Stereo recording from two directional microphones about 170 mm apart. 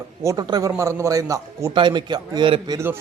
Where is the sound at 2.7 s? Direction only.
15° right (ahead or behind).